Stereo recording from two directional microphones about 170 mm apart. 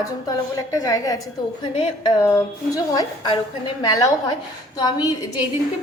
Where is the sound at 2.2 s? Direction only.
15° left (ahead or behind).